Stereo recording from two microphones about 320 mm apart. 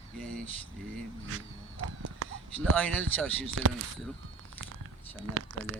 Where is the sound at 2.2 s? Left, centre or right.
Right.